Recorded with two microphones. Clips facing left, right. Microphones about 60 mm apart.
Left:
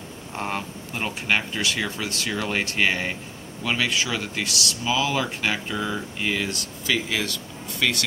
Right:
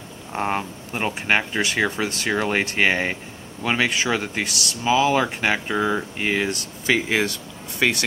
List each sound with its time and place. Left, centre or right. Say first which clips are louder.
0.3 s speech: right 5 dB; right